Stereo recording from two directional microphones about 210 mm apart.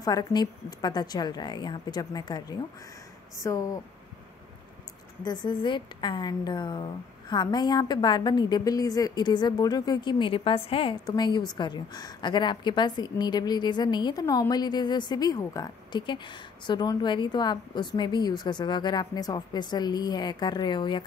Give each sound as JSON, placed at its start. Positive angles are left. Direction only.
{"t": 0.0, "sound": "a woman's voice", "side_deg": 15}
{"t": 5.2, "sound": "a woman's voice", "side_deg": 20}